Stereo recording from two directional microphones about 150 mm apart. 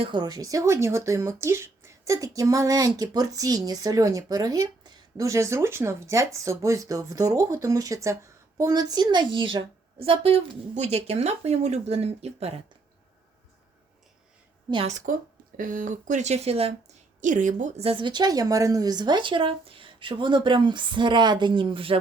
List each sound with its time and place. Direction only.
0.0 s a woman's voice: 30° right (ahead or behind)
14.8 s a woman's voice: 55° right (ahead or behind)
17.2 s a woman's voice: 60° right (ahead or behind); by 21.9 s 35° right (ahead or behind)